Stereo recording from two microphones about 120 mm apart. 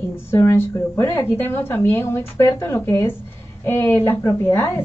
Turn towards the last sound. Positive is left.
turn(degrees=20)  # may be behind; listen again after turning